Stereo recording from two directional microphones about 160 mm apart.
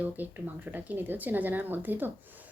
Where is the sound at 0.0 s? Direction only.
10° right (ahead or behind).